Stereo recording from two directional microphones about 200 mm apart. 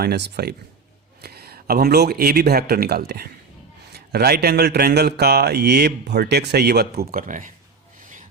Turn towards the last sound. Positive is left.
turn(degrees=-40)  # may be behind; listen again after turning